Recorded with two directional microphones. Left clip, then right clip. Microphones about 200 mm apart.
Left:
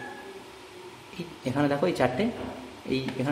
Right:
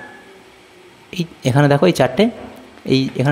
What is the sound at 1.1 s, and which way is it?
Speech, 45° right (ahead or behind).